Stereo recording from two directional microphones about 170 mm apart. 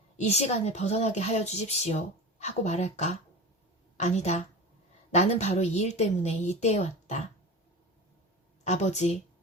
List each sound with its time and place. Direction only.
0.2 s a woman's voice: 40° left (ahead or behind)
8.6 s a woman's voice: 40° left (ahead or behind)